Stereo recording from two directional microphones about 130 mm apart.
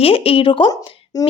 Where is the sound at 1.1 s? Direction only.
25° left (ahead or behind).